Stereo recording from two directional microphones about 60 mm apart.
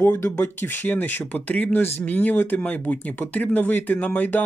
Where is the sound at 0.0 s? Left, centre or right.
Left.